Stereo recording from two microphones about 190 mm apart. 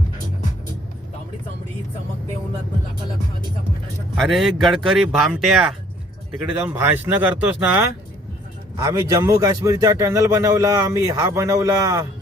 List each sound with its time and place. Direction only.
4.2 s a man's voice: centre (ahead or behind)
8.7 s a man's voice: 20° right (ahead or behind)